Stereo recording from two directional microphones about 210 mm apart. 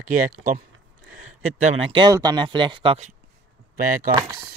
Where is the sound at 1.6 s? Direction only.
30° right (ahead or behind).